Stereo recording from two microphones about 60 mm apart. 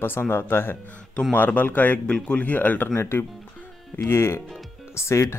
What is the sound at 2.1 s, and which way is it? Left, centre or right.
Speech, centre.